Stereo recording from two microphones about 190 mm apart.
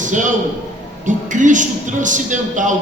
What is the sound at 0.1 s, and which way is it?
A man's voice, 40° right (ahead or behind).